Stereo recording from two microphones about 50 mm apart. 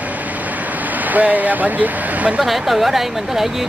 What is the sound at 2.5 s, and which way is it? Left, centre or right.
Speech, centre.